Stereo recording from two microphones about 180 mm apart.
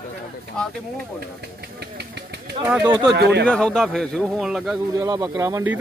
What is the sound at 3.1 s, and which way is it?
Speech, 65° right (ahead or behind).